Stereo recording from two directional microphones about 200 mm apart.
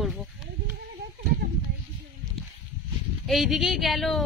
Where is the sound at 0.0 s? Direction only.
Centre (ahead or behind).